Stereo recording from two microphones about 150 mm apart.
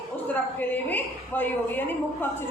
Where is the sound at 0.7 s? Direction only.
10° left (ahead or behind).